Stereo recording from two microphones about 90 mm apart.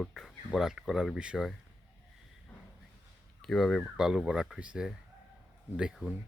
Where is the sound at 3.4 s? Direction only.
5° left (ahead or behind).